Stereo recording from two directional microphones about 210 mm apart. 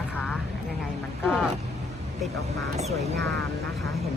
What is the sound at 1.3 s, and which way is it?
Speech, 5° right (ahead or behind).